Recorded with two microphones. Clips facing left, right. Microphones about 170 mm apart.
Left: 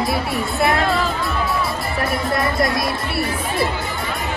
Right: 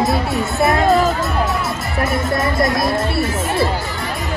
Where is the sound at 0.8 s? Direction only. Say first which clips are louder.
Right 6 dB; 45° right (ahead or behind).